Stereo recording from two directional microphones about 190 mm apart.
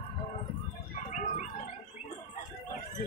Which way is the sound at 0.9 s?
40° left (ahead or behind).